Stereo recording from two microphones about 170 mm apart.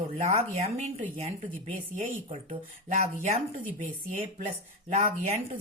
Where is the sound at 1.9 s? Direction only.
40° right (ahead or behind).